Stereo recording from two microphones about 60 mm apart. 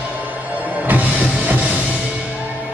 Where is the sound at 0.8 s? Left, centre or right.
Right.